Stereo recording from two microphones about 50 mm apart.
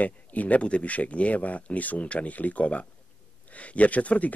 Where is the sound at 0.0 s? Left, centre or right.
Left.